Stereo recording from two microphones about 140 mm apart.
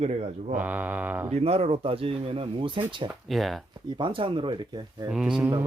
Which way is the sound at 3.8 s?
35° right (ahead or behind).